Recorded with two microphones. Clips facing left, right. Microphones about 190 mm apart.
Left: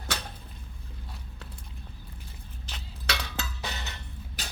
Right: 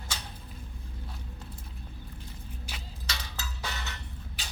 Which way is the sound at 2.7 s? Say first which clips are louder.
Left 1 dB; 10° right (ahead or behind).